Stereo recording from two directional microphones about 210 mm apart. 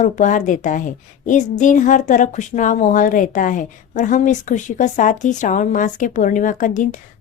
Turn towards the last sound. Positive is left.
turn(degrees=35)  # may be behind; listen again after turning